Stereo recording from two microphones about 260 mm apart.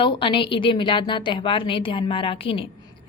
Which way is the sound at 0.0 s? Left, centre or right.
Centre.